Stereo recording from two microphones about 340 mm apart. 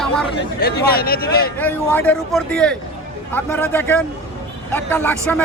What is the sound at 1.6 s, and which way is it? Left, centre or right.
Speech, centre.